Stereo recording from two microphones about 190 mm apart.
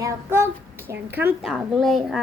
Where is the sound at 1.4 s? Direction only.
Centre (ahead or behind).